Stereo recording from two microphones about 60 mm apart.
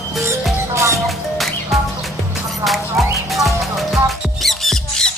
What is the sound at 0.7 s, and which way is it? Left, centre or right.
Music, right.